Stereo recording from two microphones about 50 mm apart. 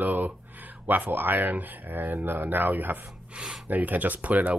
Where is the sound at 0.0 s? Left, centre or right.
Right.